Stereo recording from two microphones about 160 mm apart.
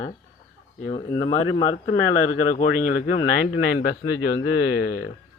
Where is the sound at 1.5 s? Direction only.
50° left (ahead or behind).